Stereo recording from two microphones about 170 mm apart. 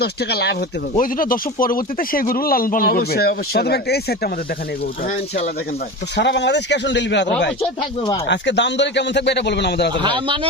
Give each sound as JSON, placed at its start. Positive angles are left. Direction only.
{"t": 0.0, "sound": "speech", "side_deg": 70}
{"t": 0.9, "sound": "speech", "side_deg": 55}
{"t": 6.1, "sound": "a man's voice", "side_deg": 90}
{"t": 8.3, "sound": "a man's voice", "side_deg": 90}
{"t": 10.0, "sound": "speech", "side_deg": -30}